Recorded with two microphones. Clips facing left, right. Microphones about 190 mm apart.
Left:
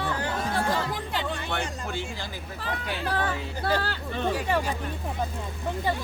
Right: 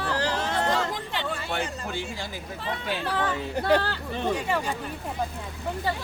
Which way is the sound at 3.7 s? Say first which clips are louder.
Right 6 dB; 65° right (ahead or behind).